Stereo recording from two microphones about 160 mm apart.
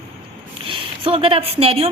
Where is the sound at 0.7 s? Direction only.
35° right (ahead or behind).